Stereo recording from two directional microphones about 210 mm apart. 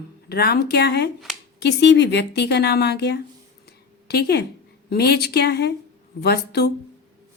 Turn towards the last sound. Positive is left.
turn(degrees=50)  # may be behind; listen again after turning